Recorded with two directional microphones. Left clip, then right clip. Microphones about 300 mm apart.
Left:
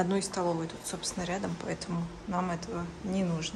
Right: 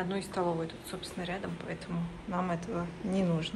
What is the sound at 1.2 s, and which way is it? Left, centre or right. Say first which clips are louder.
A woman's voice: left 3 dB; centre.